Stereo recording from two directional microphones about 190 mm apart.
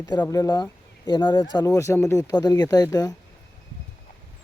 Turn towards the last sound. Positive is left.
turn(degrees=20)  # may be behind; listen again after turning